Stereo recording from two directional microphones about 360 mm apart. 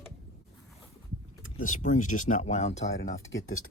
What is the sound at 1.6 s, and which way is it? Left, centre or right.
Speech, left.